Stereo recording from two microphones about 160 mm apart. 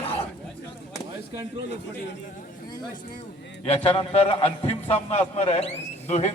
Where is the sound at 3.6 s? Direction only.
35° left (ahead or behind).